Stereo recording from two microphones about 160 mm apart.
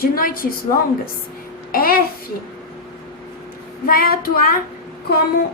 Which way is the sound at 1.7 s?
65° left (ahead or behind).